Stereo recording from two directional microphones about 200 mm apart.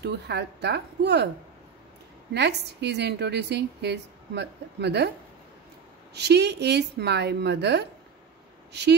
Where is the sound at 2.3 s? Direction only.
55° right (ahead or behind).